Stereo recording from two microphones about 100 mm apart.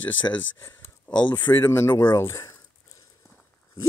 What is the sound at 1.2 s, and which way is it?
Speech, 20° left (ahead or behind).